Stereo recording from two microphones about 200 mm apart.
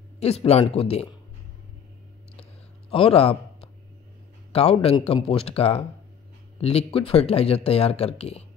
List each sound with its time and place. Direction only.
0.2 s speech: 30° left (ahead or behind)
2.9 s a sound: 30° left (ahead or behind)
4.5 s speech: 30° left (ahead or behind)